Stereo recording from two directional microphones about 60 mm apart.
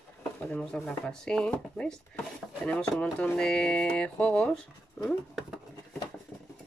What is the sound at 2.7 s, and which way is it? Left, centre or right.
Speech, centre.